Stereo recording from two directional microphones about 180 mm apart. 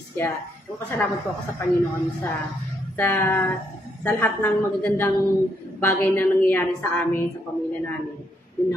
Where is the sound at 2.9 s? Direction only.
10° left (ahead or behind).